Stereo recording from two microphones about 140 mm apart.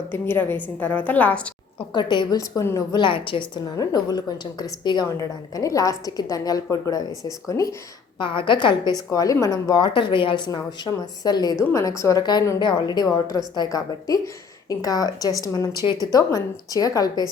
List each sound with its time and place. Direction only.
0.1 s a woman's voice: 15° left (ahead or behind)
1.9 s a woman's voice: 35° left (ahead or behind)
3.0 s a woman's voice: 35° left (ahead or behind)
8.2 s a woman's voice: 35° left (ahead or behind)
9.0 s a woman's voice: 25° left (ahead or behind)